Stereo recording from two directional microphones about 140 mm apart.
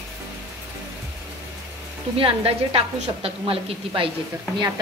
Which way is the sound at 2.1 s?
40° right (ahead or behind).